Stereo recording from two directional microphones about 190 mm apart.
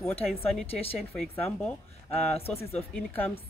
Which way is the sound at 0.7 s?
30° left (ahead or behind).